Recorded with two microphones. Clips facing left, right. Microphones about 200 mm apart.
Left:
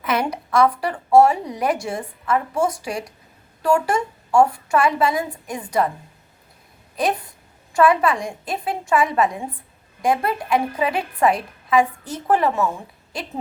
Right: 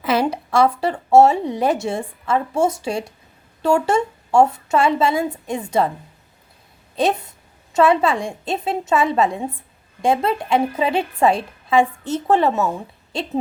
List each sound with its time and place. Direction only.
0.0 s a woman's voice: 30° right (ahead or behind)
6.9 s a woman's voice: 25° right (ahead or behind)